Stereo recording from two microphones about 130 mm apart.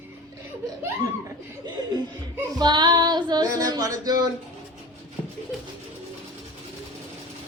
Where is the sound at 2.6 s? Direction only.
35° right (ahead or behind).